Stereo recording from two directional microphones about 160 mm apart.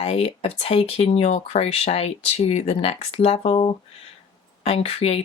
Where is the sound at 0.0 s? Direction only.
40° left (ahead or behind).